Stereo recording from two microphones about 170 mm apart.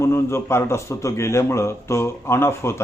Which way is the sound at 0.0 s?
15° left (ahead or behind).